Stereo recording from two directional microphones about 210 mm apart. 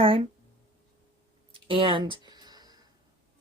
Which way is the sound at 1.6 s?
25° right (ahead or behind).